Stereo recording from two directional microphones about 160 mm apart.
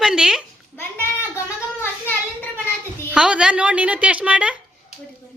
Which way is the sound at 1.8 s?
15° left (ahead or behind).